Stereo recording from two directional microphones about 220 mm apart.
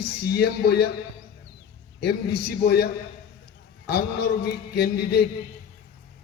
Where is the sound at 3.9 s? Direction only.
45° left (ahead or behind).